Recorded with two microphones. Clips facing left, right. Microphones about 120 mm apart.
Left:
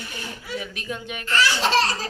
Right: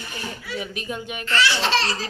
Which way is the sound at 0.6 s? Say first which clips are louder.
Right 3 dB; 5° right (ahead or behind).